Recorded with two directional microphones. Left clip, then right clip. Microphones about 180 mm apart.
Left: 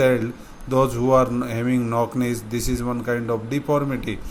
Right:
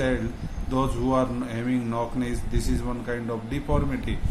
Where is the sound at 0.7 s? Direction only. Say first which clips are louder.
Left 7 dB; 40° left (ahead or behind).